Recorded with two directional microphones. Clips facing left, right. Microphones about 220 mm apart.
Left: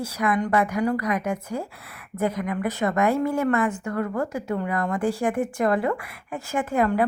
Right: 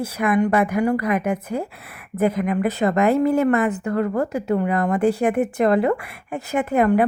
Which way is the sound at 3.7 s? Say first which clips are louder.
Right 6 dB; 35° right (ahead or behind).